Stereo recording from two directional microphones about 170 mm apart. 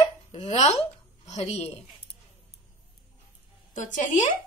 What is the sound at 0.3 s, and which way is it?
A woman's voice, 40° left (ahead or behind).